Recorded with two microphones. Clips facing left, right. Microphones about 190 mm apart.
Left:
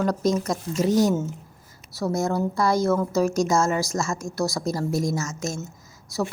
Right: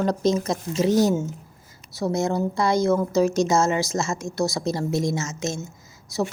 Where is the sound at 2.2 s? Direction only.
20° right (ahead or behind).